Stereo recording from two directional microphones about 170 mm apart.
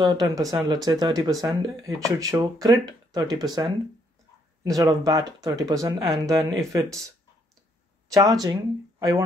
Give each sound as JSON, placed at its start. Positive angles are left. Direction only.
{"t": 0.0, "sound": "speech", "side_deg": -20}
{"t": 4.6, "sound": "speech", "side_deg": -20}
{"t": 8.1, "sound": "speech", "side_deg": -20}